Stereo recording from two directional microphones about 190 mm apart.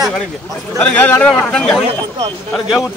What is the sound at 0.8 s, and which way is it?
Speech, 10° left (ahead or behind).